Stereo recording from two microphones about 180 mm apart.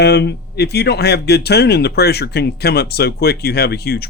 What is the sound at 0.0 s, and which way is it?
Speech, 65° left (ahead or behind).